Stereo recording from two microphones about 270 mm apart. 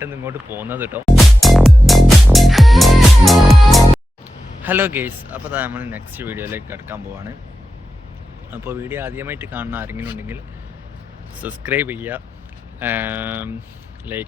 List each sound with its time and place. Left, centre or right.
0.0 s speech: centre
8.4 s speech: centre
11.4 s speech: centre